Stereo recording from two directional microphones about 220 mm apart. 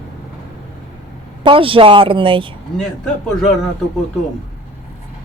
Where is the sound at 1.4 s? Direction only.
25° right (ahead or behind).